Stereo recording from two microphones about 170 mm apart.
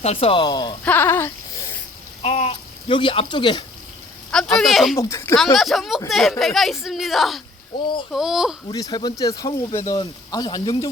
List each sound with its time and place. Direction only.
0.0 s speech: 35° left (ahead or behind)
0.9 s sheep: 15° left (ahead or behind)
2.2 s speech: 35° left (ahead or behind)
4.3 s speech: 5° left (ahead or behind)
4.9 s speech: 15° left (ahead or behind)
5.5 s speech: centre (ahead or behind)
8.7 s speech: 25° left (ahead or behind)